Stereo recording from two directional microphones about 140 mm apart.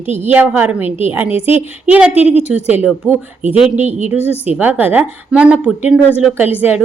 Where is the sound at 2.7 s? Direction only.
10° right (ahead or behind).